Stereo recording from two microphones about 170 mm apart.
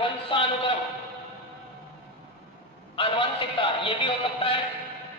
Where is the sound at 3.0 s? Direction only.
30° left (ahead or behind).